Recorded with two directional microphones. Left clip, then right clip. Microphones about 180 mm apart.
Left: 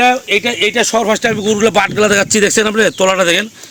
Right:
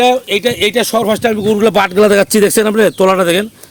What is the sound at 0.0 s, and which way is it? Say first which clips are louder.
A man's voice: even; 60° right (ahead or behind).